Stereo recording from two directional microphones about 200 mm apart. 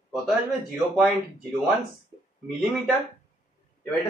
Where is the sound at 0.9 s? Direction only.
Centre (ahead or behind).